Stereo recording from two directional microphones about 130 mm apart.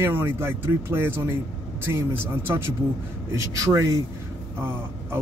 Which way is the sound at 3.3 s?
25° right (ahead or behind).